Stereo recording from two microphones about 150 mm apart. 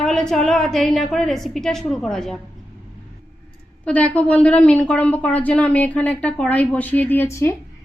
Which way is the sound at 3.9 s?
10° left (ahead or behind).